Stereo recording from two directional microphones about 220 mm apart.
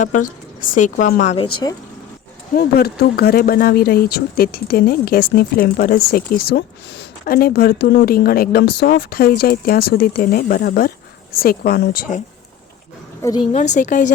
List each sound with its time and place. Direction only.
0.0 s a woman's voice: 35° left (ahead or behind)
2.5 s speech: 45° left (ahead or behind)
13.2 s a woman's voice: 20° left (ahead or behind)
13.5 s a woman's voice: 35° left (ahead or behind)